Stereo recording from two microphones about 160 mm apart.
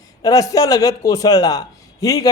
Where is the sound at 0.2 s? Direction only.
20° left (ahead or behind).